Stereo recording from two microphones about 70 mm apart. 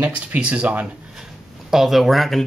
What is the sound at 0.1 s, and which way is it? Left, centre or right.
Speech, centre.